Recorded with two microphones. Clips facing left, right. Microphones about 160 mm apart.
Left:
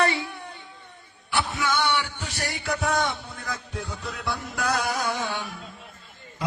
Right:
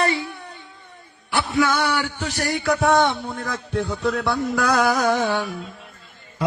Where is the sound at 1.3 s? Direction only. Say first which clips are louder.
Right 6 dB; 90° right.